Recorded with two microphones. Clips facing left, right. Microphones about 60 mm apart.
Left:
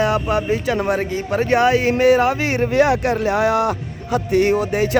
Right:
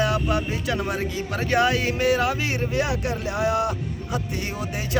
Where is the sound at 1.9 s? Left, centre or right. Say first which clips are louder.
Left 7 dB; left.